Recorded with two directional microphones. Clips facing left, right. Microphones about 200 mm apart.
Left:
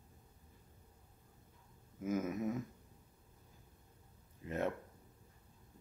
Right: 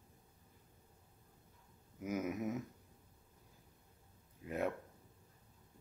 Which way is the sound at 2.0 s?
15° right (ahead or behind).